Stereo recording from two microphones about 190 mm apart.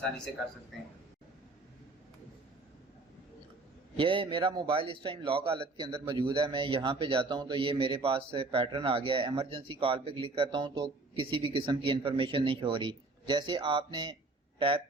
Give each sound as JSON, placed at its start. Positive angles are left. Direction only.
{"t": 3.9, "sound": "a man's voice", "side_deg": -30}